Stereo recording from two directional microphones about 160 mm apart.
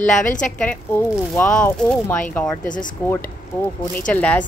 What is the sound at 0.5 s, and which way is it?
A woman's voice, 10° left (ahead or behind).